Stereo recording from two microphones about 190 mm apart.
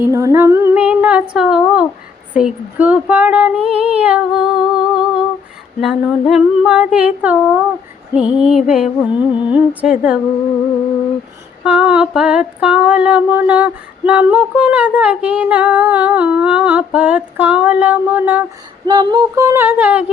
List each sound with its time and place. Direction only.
0.0 s humming: 15° right (ahead or behind)
2.3 s female singing: 5° right (ahead or behind)
11.6 s female singing: 5° right (ahead or behind)
18.9 s female singing: 25° right (ahead or behind); by 20.1 s 10° right (ahead or behind)